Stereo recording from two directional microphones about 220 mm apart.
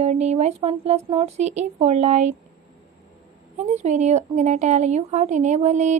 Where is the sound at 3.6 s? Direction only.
30° right (ahead or behind).